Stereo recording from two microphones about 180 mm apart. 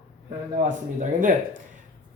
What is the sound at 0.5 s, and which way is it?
Speech, 45° right (ahead or behind).